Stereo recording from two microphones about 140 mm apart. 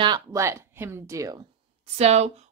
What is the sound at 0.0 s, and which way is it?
Speech, 25° right (ahead or behind).